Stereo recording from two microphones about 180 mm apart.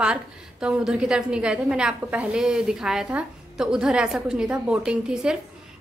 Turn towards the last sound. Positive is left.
turn(degrees=-5)  # may be behind; listen again after turning